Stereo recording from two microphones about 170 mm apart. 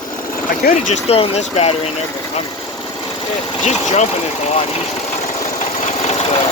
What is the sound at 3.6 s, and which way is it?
Speech, 40° left (ahead or behind).